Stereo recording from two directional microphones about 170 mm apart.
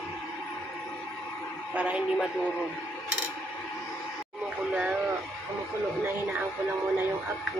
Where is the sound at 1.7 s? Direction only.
10° right (ahead or behind).